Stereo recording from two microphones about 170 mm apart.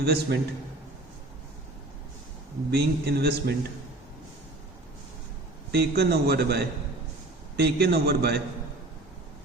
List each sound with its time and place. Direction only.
0.0 s a man's voice: 75° right (ahead or behind)
2.6 s a man's voice: 70° right (ahead or behind)
5.7 s a man's voice: 70° right (ahead or behind)